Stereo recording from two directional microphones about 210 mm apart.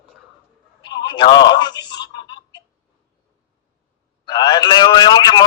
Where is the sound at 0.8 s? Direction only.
20° left (ahead or behind).